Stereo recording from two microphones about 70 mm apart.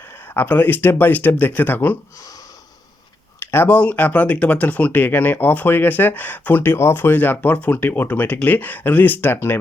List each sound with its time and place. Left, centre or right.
0.3 s speech: left
3.4 s a sound: left
3.7 s speech: left